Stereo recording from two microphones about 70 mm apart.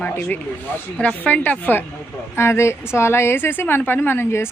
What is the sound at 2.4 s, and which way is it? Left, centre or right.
A woman's voice, left.